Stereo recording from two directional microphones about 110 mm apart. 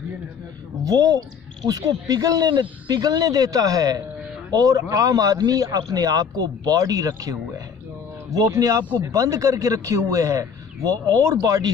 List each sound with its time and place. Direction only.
0.8 s a man's voice: 35° right (ahead or behind)